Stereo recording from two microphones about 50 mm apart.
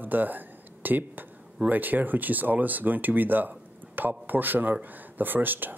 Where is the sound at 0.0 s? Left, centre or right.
Right.